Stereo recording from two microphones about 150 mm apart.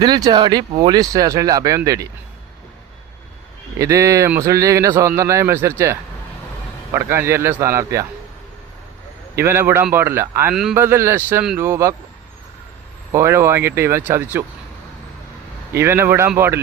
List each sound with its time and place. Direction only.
0.0 s speech: 30° right (ahead or behind)
3.8 s speech: 20° right (ahead or behind)
9.3 s speech: 15° right (ahead or behind)
10.5 s a man's voice: centre (ahead or behind)
10.8 s speech: 15° right (ahead or behind)
13.1 s speech: 15° right (ahead or behind)
15.7 s speech: 15° right (ahead or behind)